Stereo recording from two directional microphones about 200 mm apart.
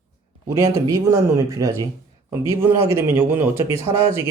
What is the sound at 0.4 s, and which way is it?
Speech, 15° right (ahead or behind).